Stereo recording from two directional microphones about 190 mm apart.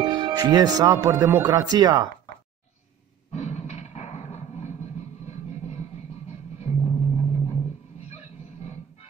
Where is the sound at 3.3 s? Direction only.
35° left (ahead or behind).